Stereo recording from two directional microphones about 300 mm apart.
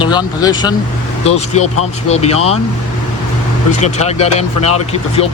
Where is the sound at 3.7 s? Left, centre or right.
Left.